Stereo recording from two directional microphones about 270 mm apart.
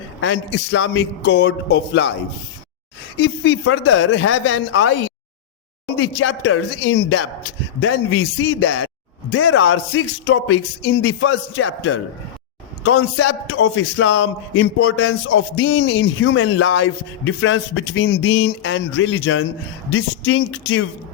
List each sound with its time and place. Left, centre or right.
0.2 s a man's voice: left
3.2 s a man's voice: left
6.0 s a man's voice: left